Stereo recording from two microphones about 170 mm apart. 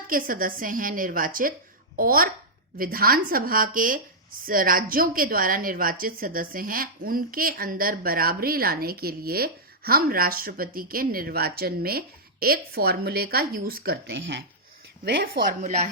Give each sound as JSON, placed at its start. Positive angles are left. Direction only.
{"t": 0.1, "sound": "speech", "side_deg": -55}
{"t": 15.0, "sound": "a woman's voice", "side_deg": -65}